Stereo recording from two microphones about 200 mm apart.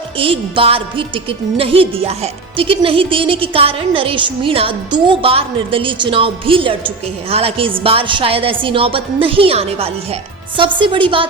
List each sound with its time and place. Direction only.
0.2 s a woman's voice: 25° right (ahead or behind)